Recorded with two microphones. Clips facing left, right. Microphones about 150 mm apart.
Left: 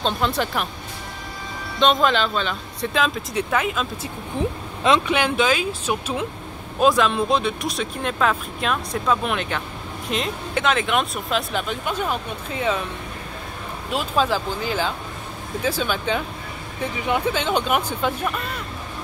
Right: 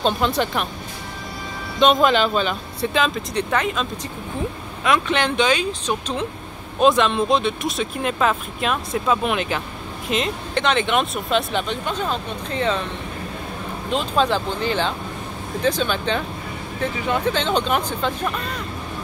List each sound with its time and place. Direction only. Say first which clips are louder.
0.0 s speech: right 2 dB; centre (ahead or behind)
1.8 s speech: right 3 dB; 5° right (ahead or behind)
5.0 s speech: even; 10° left (ahead or behind)
13.9 s speech: right 1 dB; 5° left (ahead or behind)